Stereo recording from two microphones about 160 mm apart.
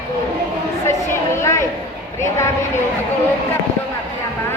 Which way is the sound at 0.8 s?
15° left (ahead or behind).